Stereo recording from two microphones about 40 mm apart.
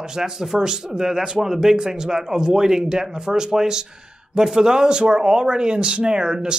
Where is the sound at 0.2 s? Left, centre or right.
Centre.